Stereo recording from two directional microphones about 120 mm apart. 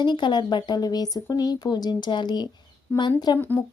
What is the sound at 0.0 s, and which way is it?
Speech, 40° left (ahead or behind).